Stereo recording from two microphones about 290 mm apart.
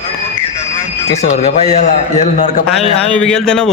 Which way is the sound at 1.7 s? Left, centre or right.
Left.